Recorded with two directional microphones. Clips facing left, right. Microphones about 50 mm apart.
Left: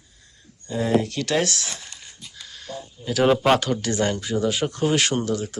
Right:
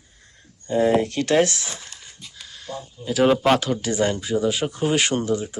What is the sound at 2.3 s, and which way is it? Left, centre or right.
Speech, centre.